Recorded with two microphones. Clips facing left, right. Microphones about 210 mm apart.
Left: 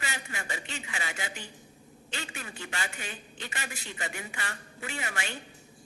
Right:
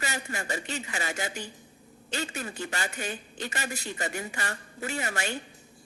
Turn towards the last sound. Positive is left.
turn(degrees=-40)  # may be behind; listen again after turning